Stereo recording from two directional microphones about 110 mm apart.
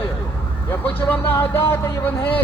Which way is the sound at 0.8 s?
15° left (ahead or behind).